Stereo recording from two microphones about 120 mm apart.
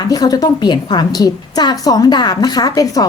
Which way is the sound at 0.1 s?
30° left (ahead or behind).